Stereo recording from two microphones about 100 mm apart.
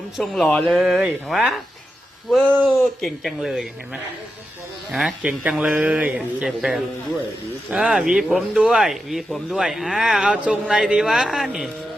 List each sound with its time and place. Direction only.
0.2 s speech: 5° left (ahead or behind)
2.6 s speech: centre (ahead or behind)
4.9 s speech: centre (ahead or behind)
5.2 s a man's voice: 10° right (ahead or behind)